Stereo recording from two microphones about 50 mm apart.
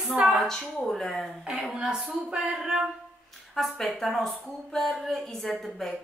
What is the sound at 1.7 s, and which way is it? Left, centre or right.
Speech, centre.